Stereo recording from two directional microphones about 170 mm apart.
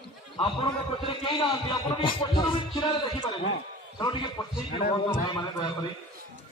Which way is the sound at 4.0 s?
25° left (ahead or behind).